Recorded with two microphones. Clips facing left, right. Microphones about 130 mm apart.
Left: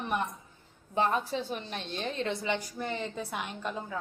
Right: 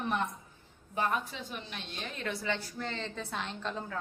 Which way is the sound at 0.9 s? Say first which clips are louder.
Left 4 dB; 30° left (ahead or behind).